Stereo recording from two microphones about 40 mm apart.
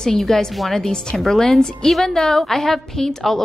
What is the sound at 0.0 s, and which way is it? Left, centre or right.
A woman's voice, centre.